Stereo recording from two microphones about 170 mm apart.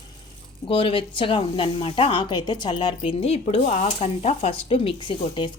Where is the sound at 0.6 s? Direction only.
30° left (ahead or behind).